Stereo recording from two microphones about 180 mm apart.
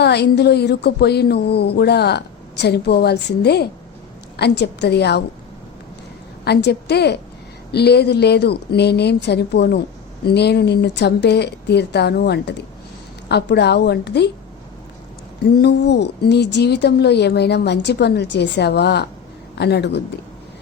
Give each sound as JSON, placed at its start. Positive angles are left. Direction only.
{"t": 0.0, "sound": "speech", "side_deg": 65}
{"t": 6.4, "sound": "speech", "side_deg": 65}
{"t": 15.5, "sound": "speech", "side_deg": 70}